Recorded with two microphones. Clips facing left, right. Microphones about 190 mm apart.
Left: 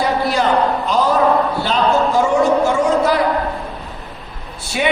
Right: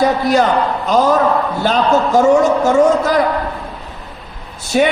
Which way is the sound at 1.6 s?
45° right (ahead or behind).